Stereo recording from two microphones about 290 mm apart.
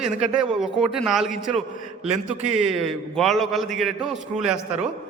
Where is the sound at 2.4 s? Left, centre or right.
Right.